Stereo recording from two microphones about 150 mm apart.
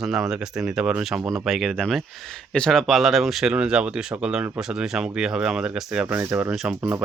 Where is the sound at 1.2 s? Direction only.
25° right (ahead or behind).